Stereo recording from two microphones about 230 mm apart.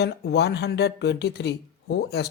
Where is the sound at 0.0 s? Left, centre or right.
Left.